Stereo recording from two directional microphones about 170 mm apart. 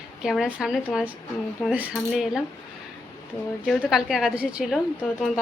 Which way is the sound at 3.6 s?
Centre (ahead or behind).